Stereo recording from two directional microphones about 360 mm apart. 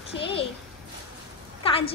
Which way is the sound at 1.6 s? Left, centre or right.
Centre.